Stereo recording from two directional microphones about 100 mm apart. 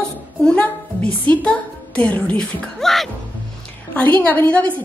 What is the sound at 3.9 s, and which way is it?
Speech, 15° left (ahead or behind).